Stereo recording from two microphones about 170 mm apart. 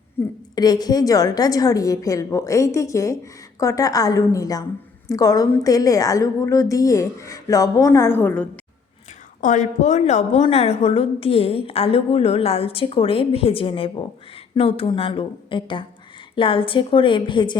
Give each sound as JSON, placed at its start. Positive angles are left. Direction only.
{"t": 0.5, "sound": "a woman's voice", "side_deg": 25}
{"t": 9.4, "sound": "a woman's voice", "side_deg": 50}